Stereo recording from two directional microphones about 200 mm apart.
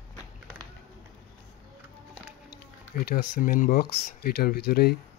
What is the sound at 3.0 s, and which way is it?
Speech, 50° left (ahead or behind).